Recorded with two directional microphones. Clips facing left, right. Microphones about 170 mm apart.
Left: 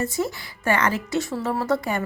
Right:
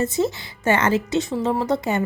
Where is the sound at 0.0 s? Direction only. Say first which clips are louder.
Right 4 dB; 25° right (ahead or behind).